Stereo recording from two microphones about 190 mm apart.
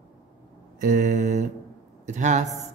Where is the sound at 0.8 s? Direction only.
40° right (ahead or behind).